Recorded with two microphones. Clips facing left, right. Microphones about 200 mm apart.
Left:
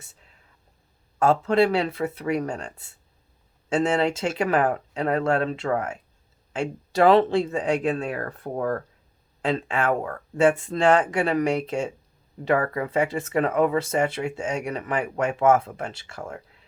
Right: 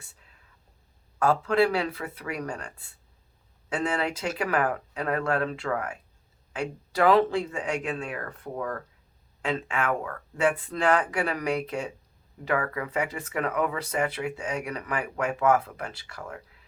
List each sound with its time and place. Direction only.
1.2 s speech: 25° left (ahead or behind)